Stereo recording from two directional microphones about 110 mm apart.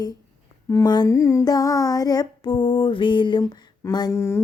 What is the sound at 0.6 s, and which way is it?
Speech, 30° left (ahead or behind).